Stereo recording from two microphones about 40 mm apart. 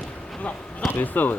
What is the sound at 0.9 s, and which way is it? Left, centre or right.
Speech, left.